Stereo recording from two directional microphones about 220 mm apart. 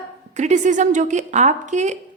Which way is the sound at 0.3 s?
30° right (ahead or behind).